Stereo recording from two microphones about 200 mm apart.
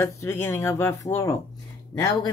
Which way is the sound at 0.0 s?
10° left (ahead or behind).